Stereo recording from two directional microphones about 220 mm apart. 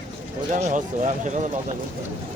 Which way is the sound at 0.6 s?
35° right (ahead or behind).